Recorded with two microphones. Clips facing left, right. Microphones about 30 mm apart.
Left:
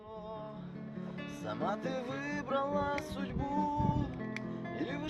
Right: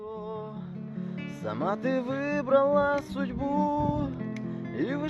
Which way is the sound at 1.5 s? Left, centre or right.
Right.